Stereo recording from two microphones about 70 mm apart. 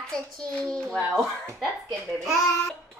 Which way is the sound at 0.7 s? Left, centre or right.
Centre.